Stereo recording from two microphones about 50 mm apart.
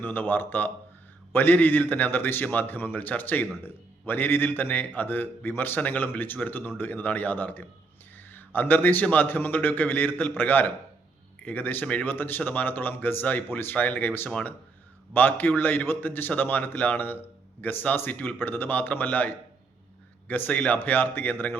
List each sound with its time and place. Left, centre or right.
0.0 s a man's voice: left
15.1 s a man's voice: left
18.1 s a man's voice: left
20.7 s a man's voice: left